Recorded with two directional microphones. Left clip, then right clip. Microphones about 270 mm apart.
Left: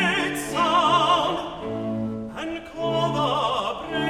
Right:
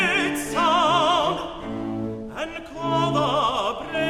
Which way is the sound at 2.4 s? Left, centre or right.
Right.